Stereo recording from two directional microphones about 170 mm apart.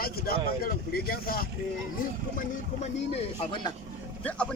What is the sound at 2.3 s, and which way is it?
Speech, 45° left (ahead or behind).